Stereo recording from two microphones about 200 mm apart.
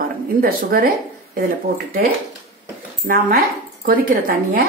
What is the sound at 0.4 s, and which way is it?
Speech, 45° right (ahead or behind).